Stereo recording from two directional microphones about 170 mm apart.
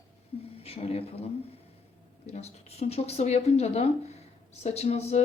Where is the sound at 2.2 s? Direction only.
40° left (ahead or behind).